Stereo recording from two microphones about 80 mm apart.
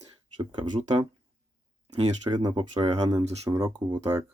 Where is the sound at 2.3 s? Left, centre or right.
Right.